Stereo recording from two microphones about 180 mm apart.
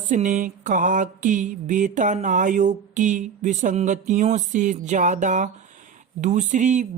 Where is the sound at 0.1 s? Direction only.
45° right (ahead or behind).